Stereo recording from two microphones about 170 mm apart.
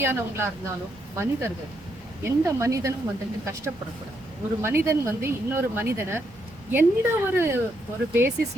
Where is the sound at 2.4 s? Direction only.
15° right (ahead or behind).